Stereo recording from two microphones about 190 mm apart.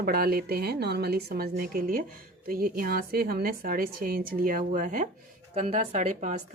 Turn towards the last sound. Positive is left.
turn(degrees=-40)  # may be behind; listen again after turning